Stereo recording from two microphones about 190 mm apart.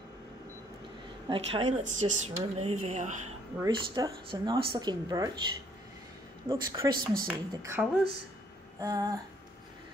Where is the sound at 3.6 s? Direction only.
20° right (ahead or behind).